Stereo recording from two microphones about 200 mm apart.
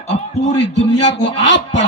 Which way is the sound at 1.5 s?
60° left (ahead or behind).